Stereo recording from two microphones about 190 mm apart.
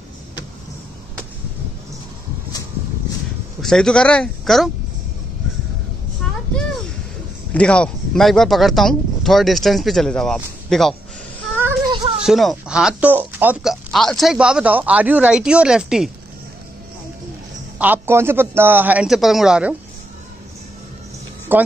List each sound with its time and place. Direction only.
3.6 s speech: 5° left (ahead or behind)
7.5 s speech: 5° left (ahead or behind)
11.8 s children playing: 20° right (ahead or behind)
12.2 s speech: centre (ahead or behind)
17.7 s a man's voice: 10° right (ahead or behind)
21.5 s a man's voice: 10° right (ahead or behind)